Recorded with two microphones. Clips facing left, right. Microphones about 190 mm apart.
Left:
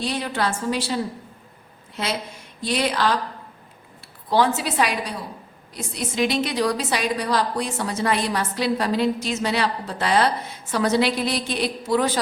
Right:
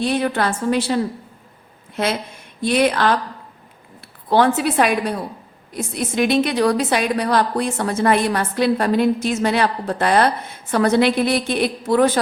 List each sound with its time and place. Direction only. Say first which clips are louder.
0.0 s a woman's voice: right 5 dB; 55° right (ahead or behind)
2.6 s a woman's voice: right 6 dB; 55° right (ahead or behind)
4.3 s a woman's voice: right 4 dB; 55° right (ahead or behind)